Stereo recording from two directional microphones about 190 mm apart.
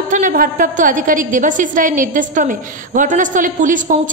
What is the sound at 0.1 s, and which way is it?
A woman's voice, 45° right (ahead or behind).